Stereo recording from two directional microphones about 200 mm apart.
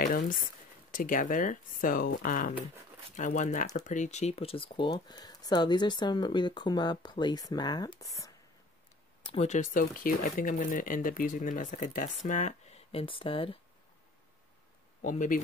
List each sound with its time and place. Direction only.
0.0 s speech: 45° left (ahead or behind); by 8.3 s 15° left (ahead or behind)
9.2 s speech: 30° left (ahead or behind)
15.0 s speech: 40° left (ahead or behind)